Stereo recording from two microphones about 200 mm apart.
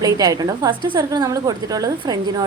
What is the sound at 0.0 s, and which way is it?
A woman's voice, 20° right (ahead or behind).